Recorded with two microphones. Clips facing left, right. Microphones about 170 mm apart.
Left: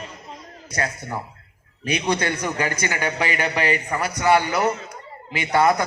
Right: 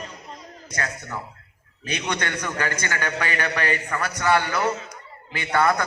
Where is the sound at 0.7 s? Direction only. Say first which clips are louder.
Left 4 dB; 30° left (ahead or behind).